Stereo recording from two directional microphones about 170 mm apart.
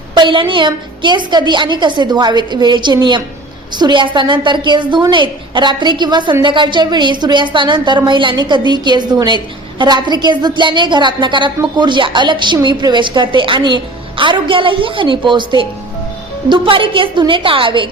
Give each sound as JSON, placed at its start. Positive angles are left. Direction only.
{"t": 0.1, "sound": "a woman's voice", "side_deg": -30}